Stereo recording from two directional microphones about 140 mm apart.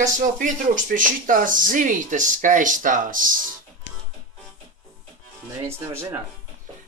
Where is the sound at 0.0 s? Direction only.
70° right (ahead or behind).